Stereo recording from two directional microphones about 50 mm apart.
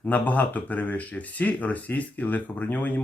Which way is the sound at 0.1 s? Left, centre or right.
Left.